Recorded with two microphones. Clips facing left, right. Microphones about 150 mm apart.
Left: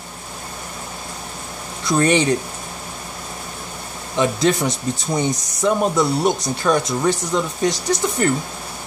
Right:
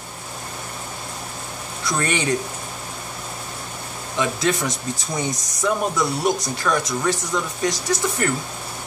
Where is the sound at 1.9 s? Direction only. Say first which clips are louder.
Left 8 dB; 25° left (ahead or behind).